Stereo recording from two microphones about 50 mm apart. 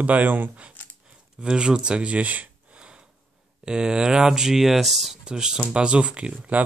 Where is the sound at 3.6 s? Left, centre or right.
Centre.